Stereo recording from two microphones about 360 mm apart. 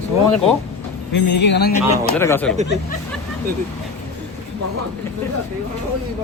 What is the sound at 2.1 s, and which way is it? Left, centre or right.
Speech, centre.